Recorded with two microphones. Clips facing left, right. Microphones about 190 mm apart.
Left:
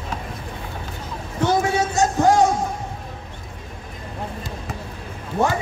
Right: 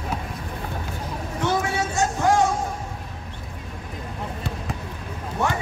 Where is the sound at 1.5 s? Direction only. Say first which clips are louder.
Left 4 dB; 40° left (ahead or behind).